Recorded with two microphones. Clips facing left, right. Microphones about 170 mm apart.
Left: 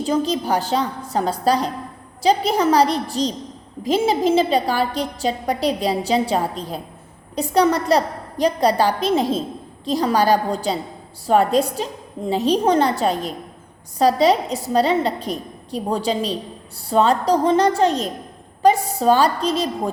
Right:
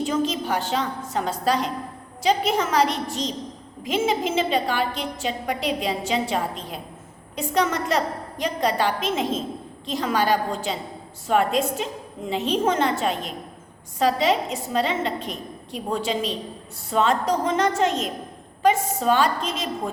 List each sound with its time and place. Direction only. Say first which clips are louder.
0.0 s a woman's voice: left 3 dB; 35° left (ahead or behind)